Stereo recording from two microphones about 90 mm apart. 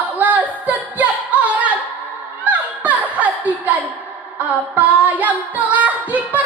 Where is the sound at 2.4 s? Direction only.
15° right (ahead or behind).